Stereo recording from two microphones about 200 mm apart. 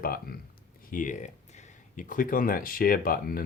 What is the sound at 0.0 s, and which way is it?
Speech, 50° left (ahead or behind).